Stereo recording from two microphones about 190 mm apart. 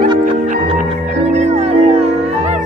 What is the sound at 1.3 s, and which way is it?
Music, 35° right (ahead or behind).